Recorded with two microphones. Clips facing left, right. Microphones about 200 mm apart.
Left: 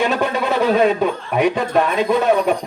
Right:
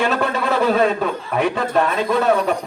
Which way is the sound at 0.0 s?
15° left (ahead or behind).